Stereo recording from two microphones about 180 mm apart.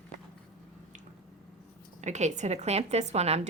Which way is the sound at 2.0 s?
40° right (ahead or behind).